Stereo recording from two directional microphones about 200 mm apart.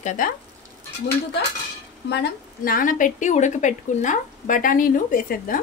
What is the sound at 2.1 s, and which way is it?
A woman's voice, 50° left (ahead or behind).